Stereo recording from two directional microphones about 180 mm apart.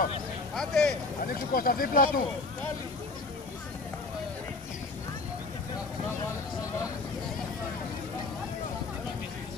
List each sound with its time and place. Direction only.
0.6 s speech: 5° left (ahead or behind)
1.2 s speech: 55° left (ahead or behind)